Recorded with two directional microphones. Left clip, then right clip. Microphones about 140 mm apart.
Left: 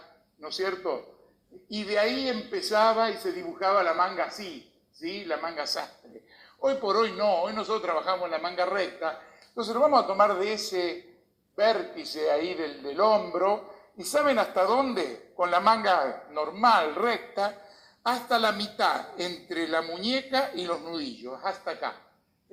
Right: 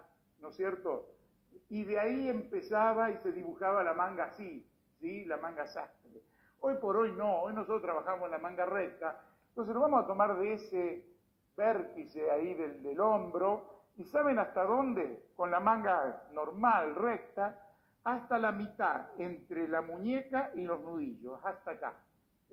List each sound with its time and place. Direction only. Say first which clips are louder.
0.6 s speech: left 6 dB; 25° left (ahead or behind)